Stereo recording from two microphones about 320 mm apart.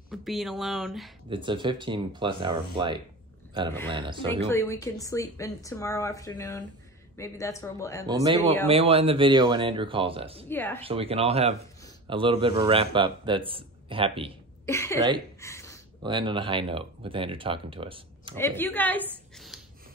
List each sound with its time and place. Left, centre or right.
0.1 s a woman's voice: centre
1.3 s speech: centre
4.5 s a woman's voice: centre
8.1 s speech: centre
10.5 s a woman's voice: centre
10.8 s speech: centre
14.7 s a woman's voice: centre
15.4 s a sound: centre
16.0 s speech: centre
18.3 s a woman's voice: centre